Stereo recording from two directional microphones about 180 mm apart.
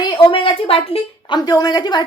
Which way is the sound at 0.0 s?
30° left (ahead or behind).